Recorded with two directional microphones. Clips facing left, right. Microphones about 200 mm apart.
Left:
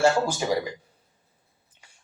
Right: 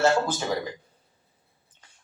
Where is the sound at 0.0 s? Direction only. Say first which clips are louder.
Left 1 dB; 10° left (ahead or behind).